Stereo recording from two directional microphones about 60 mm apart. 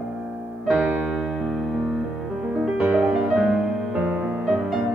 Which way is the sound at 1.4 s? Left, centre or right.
Centre.